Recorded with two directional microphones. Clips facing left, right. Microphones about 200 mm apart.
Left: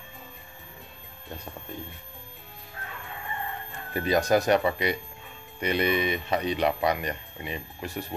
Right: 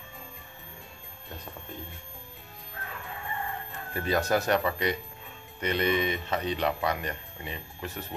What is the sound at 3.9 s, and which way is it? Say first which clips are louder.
Speech: left 4 dB; 15° left (ahead or behind).